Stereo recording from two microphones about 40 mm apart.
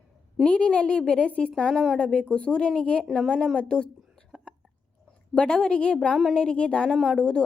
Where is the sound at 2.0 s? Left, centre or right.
Left.